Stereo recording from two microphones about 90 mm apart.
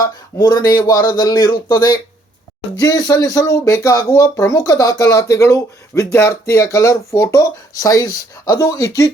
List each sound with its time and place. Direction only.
0.3 s speech: 50° left (ahead or behind)